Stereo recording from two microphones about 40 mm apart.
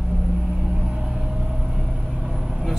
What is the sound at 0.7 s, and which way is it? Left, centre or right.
Vehicle, centre.